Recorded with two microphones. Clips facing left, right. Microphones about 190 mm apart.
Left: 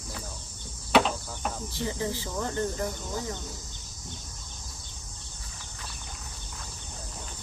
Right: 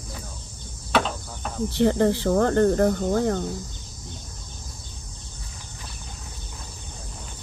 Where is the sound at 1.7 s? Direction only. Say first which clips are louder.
Right 15 dB; 65° right (ahead or behind).